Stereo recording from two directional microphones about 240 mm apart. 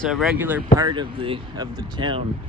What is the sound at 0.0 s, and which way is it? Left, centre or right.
Speech, centre.